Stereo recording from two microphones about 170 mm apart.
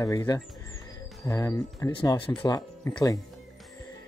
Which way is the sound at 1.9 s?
30° left (ahead or behind).